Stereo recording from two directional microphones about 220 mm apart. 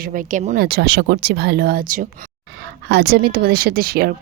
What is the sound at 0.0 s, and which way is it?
Speech, 40° right (ahead or behind).